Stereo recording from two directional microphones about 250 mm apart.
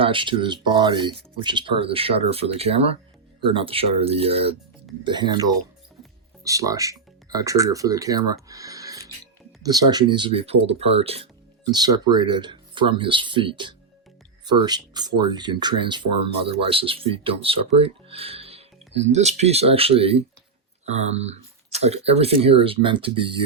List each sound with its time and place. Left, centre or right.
0.0 s speech: centre